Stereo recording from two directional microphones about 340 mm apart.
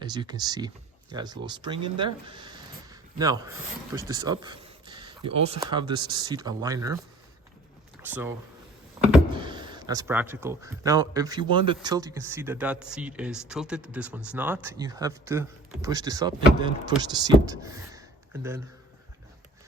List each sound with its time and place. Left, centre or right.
0.0 s speech: centre
8.0 s speech: centre
9.0 s power windows: centre
9.4 s speech: centre